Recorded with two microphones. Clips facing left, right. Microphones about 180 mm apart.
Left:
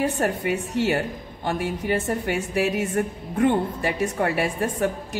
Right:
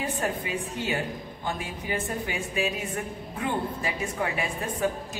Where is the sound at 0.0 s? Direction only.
70° left (ahead or behind).